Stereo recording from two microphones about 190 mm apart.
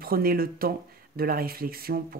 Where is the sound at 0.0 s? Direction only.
50° right (ahead or behind).